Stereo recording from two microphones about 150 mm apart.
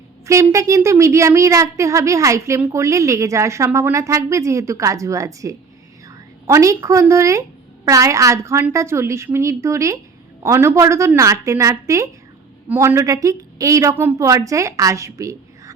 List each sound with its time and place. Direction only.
0.3 s a woman's voice: 20° right (ahead or behind)